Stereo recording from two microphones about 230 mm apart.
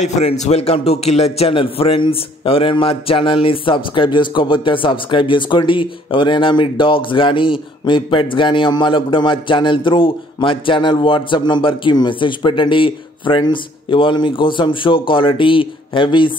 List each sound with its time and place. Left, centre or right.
0.0 s a man's voice: left